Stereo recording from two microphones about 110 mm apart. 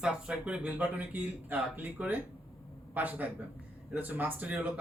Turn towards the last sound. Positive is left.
turn(degrees=-15)  # may be behind; listen again after turning